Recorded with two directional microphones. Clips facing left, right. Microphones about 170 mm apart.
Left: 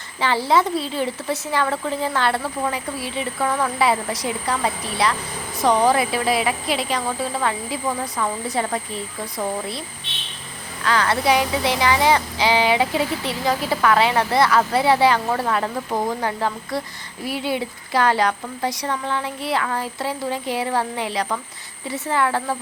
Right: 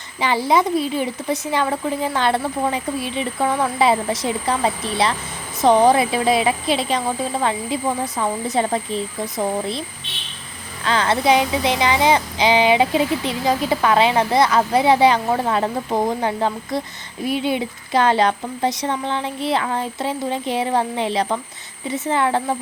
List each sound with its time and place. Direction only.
0.2 s speech: 15° right (ahead or behind)
10.8 s speech: 25° right (ahead or behind)